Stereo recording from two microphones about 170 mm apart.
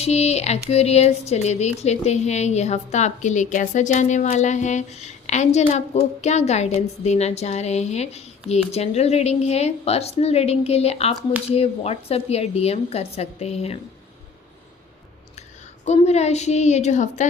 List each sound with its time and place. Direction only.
0.0 s speech: 40° left (ahead or behind)
15.8 s speech: 40° left (ahead or behind)